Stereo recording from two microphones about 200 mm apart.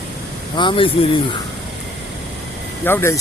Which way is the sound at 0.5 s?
25° left (ahead or behind).